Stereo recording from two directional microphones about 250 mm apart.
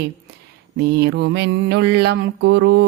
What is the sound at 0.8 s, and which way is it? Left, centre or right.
Mantra, right.